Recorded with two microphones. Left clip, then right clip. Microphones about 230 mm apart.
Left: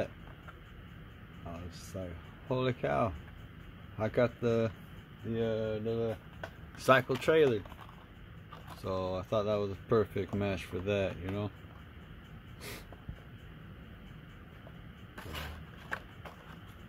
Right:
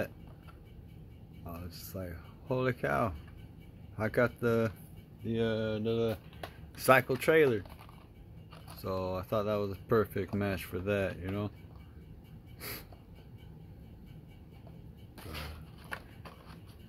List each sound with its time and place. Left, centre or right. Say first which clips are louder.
1.5 s speech: even; centre
5.3 s mantra: right 1 dB; right
6.8 s speech: right 1 dB; centre
8.8 s speech: even; centre